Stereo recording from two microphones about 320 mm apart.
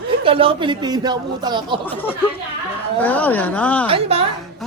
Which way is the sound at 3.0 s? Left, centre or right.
Centre.